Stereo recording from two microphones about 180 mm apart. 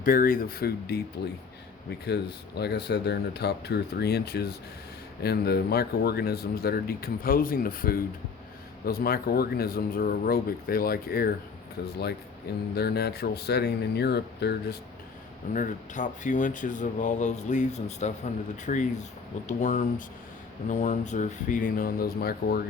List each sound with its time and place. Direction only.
0.0 s speech: 50° left (ahead or behind)
2.0 s speech: 65° left (ahead or behind)
12.7 s speech: 65° left (ahead or behind)
15.5 s speech: 45° left (ahead or behind)